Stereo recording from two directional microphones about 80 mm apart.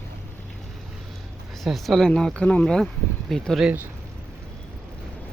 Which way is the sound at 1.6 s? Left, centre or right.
Centre.